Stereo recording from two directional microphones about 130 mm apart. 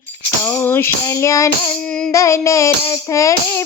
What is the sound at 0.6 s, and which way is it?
Music, 20° left (ahead or behind).